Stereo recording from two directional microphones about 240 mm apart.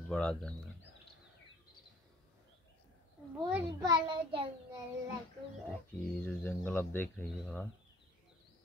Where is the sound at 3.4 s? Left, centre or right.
Centre.